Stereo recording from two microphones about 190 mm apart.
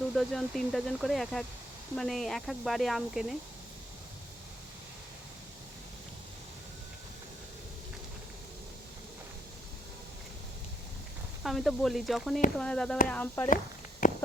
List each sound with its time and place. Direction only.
0.1 s speech: centre (ahead or behind)
11.4 s speech: centre (ahead or behind)
14.0 s walk: 45° left (ahead or behind)